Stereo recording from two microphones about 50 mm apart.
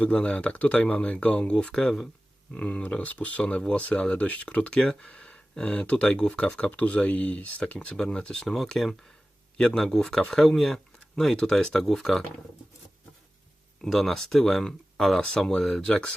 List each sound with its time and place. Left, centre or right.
0.0 s a man's voice: left; by 12.2 s centre
13.8 s a man's voice: centre